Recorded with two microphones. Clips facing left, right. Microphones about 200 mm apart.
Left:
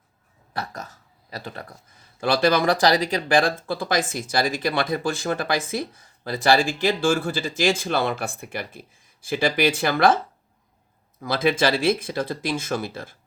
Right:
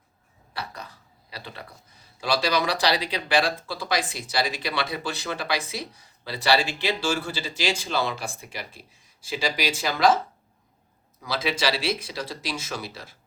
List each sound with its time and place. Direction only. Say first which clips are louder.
0.5 s a sound: left 4 dB; 45° left (ahead or behind)
2.2 s speech: left 5 dB; 55° left (ahead or behind)
11.2 s speech: left 6 dB; 50° left (ahead or behind)